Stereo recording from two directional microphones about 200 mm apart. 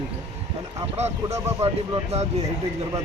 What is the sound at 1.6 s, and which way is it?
Speech, 30° right (ahead or behind).